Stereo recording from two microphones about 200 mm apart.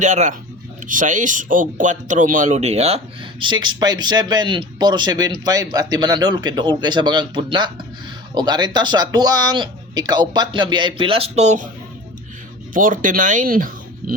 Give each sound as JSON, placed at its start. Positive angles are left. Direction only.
{"t": 0.0, "sound": "speech", "side_deg": -40}
{"t": 12.7, "sound": "speech", "side_deg": -40}